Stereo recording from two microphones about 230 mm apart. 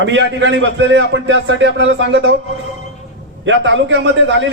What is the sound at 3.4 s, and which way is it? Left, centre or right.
A man's voice, right.